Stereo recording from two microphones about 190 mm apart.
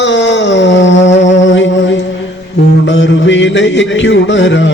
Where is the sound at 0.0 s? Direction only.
70° left (ahead or behind).